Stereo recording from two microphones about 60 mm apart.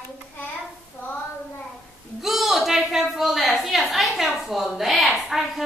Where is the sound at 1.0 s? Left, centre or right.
Left.